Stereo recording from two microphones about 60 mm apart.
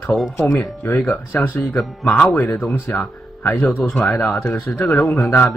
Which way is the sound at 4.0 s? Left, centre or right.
Centre.